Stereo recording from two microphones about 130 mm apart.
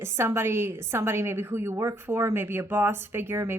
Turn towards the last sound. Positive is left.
turn(degrees=-20)  # may be behind; listen again after turning